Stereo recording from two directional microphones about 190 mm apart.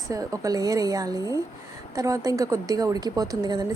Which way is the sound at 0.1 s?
20° right (ahead or behind).